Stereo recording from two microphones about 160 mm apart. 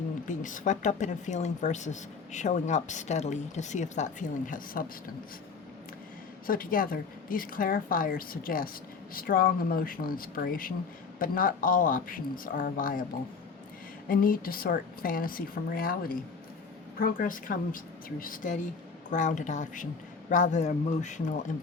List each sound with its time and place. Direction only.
0.3 s speech: 55° left (ahead or behind)
6.5 s a woman's voice: 60° left (ahead or behind)
14.1 s a woman's voice: 60° left (ahead or behind)